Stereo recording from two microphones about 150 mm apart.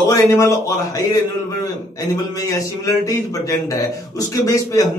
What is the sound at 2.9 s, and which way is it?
Speech, 25° left (ahead or behind).